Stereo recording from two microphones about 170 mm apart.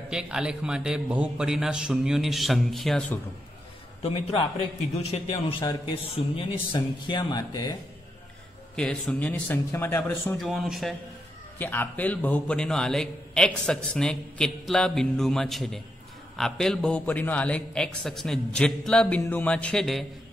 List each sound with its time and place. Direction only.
0.1 s a man's voice: 5° right (ahead or behind)
4.0 s a man's voice: 30° left (ahead or behind)
8.7 s speech: 5° left (ahead or behind)
10.3 s a man's voice: centre (ahead or behind)
11.5 s a man's voice: 10° left (ahead or behind)